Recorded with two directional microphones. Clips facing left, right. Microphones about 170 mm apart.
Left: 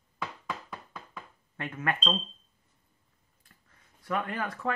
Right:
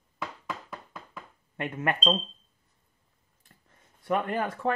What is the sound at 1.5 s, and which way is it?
Speech, 20° right (ahead or behind).